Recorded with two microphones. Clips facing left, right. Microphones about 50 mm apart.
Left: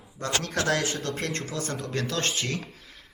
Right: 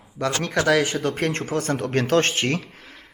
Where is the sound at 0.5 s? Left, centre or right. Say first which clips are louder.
Right 8 dB; right.